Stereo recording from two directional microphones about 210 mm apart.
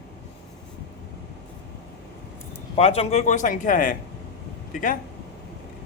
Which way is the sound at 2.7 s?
30° left (ahead or behind).